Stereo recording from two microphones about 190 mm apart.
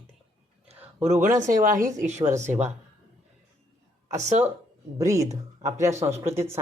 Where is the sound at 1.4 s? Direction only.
45° right (ahead or behind).